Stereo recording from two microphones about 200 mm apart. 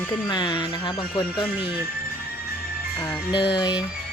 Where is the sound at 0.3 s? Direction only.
20° left (ahead or behind).